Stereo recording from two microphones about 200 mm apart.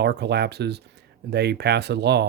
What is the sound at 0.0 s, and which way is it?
Speech, 55° right (ahead or behind).